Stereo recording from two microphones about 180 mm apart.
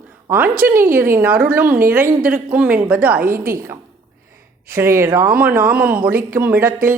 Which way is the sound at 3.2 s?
50° right (ahead or behind).